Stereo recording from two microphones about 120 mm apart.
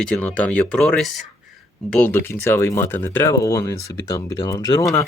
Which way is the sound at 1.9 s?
15° left (ahead or behind).